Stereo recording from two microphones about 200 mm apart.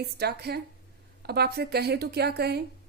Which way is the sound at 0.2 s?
55° right (ahead or behind).